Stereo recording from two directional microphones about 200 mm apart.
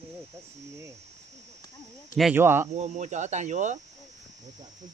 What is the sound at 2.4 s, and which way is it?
Speech, 10° right (ahead or behind).